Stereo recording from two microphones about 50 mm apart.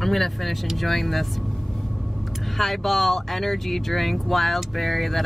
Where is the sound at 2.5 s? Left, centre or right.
Centre.